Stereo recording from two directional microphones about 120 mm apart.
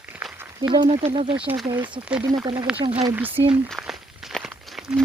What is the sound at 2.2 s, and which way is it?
Speech, 30° right (ahead or behind).